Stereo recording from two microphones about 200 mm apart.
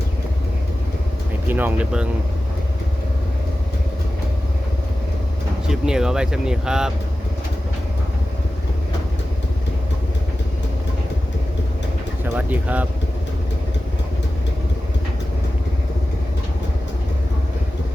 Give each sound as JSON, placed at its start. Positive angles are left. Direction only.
{"t": 1.5, "sound": "speech", "side_deg": -10}
{"t": 5.6, "sound": "speech", "side_deg": -5}
{"t": 12.2, "sound": "speech", "side_deg": -10}